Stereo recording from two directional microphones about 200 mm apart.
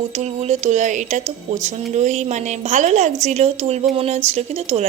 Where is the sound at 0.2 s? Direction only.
35° right (ahead or behind).